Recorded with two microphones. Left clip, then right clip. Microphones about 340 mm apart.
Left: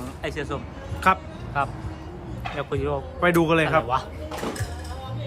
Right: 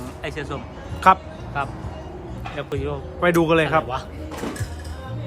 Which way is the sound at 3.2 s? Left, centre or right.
Centre.